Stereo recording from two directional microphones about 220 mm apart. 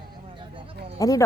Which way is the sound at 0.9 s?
15° left (ahead or behind).